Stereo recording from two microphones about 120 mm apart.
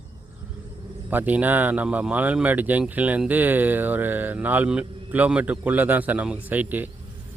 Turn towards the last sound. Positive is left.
turn(degrees=-15)  # may be behind; listen again after turning